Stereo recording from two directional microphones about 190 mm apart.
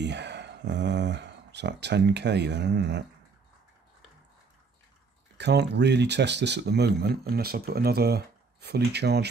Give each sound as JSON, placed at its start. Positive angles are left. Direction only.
{"t": 0.0, "sound": "speech", "side_deg": -65}
{"t": 5.4, "sound": "speech", "side_deg": -65}